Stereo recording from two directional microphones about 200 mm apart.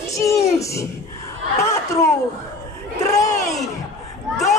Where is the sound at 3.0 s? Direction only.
15° left (ahead or behind).